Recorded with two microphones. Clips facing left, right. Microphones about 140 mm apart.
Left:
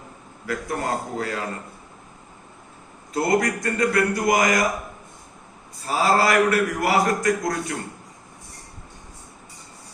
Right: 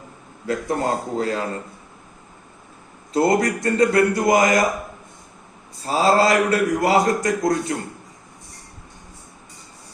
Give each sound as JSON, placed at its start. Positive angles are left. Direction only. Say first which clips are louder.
{"t": 0.4, "sound": "a man's voice", "louder": "right 4 dB", "side_deg": -25}
{"t": 3.1, "sound": "a man's voice", "louder": "right 3 dB", "side_deg": -25}
{"t": 5.8, "sound": "a man's voice", "louder": "right 3 dB", "side_deg": -25}